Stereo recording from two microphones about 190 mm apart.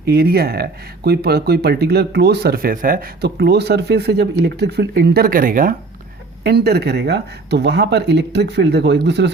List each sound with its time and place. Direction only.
0.0 s speech: 55° right (ahead or behind)
6.4 s speech: 60° right (ahead or behind)